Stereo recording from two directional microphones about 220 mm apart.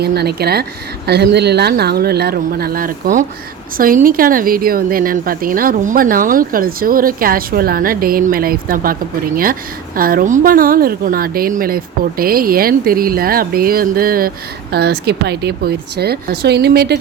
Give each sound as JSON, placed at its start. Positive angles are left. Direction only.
{"t": 0.0, "sound": "speech", "side_deg": -45}